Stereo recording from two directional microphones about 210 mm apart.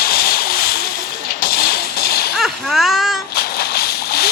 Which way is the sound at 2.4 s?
Centre (ahead or behind).